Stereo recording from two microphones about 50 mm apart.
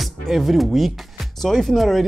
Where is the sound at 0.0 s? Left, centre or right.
Centre.